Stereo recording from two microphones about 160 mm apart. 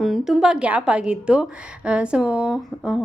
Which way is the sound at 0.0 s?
Centre (ahead or behind).